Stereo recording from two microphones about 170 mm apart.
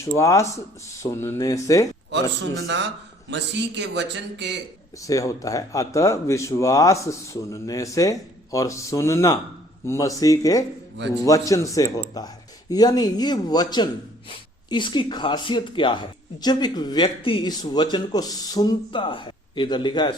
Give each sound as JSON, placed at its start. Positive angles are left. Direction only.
{"t": 0.0, "sound": "speech", "side_deg": 20}
{"t": 2.6, "sound": "a man's voice", "side_deg": -90}
{"t": 5.0, "sound": "speech", "side_deg": 20}